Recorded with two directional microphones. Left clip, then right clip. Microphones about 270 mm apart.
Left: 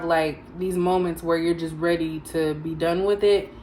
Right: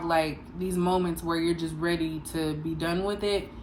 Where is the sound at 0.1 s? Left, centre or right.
Right.